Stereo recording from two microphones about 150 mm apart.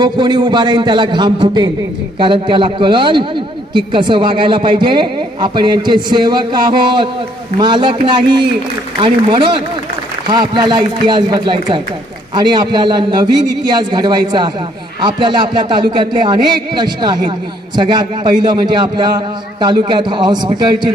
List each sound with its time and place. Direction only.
0.0 s a man's voice: 30° right (ahead or behind)
9.0 s a man's voice: 35° right (ahead or behind)